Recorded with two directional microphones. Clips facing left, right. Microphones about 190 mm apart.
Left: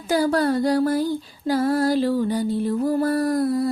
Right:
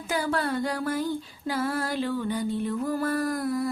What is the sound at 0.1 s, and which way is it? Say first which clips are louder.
Music: left 8 dB; 35° left (ahead or behind).